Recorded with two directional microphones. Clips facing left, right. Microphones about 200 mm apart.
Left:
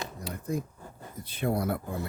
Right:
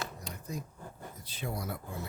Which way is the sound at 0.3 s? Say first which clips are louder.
Left 9 dB; 55° left (ahead or behind).